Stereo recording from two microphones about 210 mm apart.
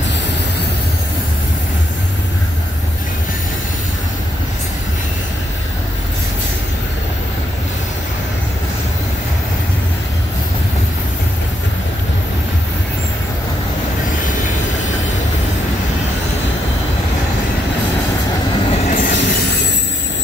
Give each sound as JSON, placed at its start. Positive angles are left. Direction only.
{"t": 18.7, "sound": "train", "side_deg": 35}
{"t": 19.0, "sound": "train wheels squealing", "side_deg": 55}